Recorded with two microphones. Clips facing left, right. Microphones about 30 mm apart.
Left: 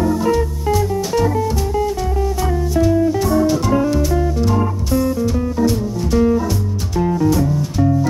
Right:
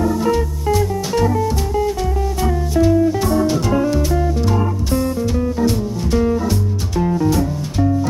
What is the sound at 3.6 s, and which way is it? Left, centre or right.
Music, centre.